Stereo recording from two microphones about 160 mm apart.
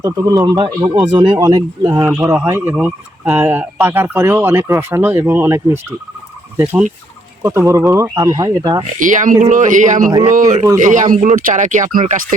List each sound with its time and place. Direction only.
0.0 s speech: 20° right (ahead or behind)
7.4 s speech: 20° right (ahead or behind)
9.0 s speech: 55° right (ahead or behind)